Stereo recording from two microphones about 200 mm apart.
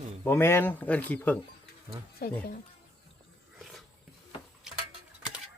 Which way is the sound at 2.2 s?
50° left (ahead or behind).